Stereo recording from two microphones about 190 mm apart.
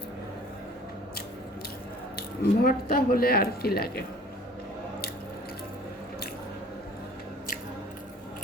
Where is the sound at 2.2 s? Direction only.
50° left (ahead or behind).